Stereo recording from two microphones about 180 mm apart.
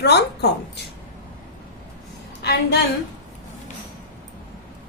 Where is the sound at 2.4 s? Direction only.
65° left (ahead or behind).